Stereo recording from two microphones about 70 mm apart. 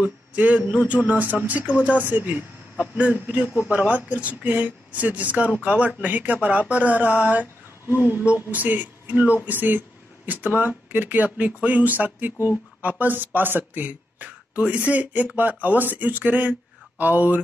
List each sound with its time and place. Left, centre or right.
0.4 s a man's voice: centre
8.5 s speech: right